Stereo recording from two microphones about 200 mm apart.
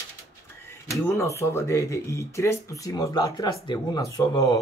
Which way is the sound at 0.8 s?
15° left (ahead or behind).